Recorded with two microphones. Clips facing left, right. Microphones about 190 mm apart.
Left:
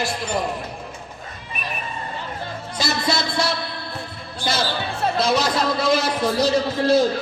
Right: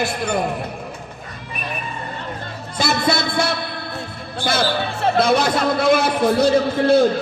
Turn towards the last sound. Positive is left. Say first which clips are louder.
# right 3 dB
turn(degrees=-60)  # may be behind; listen again after turning